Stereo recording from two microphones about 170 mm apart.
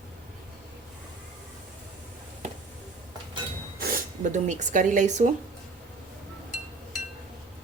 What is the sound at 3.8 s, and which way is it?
Speech, 60° right (ahead or behind).